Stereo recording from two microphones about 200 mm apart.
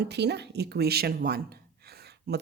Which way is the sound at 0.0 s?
55° right (ahead or behind).